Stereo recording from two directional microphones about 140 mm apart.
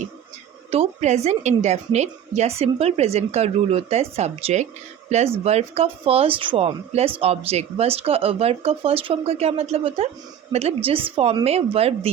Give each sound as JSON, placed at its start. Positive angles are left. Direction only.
{"t": 0.7, "sound": "a woman's voice", "side_deg": -50}